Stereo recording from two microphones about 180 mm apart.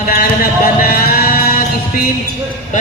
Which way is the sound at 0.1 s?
55° left (ahead or behind).